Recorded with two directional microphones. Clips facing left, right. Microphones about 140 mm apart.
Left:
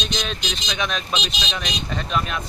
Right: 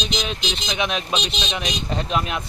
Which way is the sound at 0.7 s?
20° right (ahead or behind).